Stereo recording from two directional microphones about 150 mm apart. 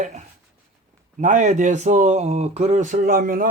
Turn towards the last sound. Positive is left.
turn(degrees=-70)  # may be behind; listen again after turning